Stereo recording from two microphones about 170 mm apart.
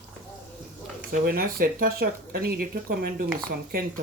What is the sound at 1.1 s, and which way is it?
Speech, 60° right (ahead or behind).